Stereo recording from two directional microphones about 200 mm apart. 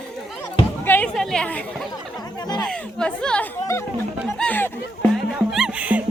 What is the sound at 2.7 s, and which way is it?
Speech, 5° left (ahead or behind).